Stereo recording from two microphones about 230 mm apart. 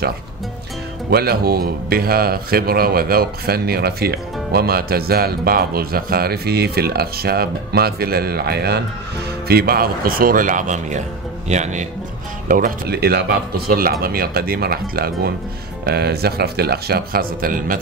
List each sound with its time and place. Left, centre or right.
1.1 s a man's voice: right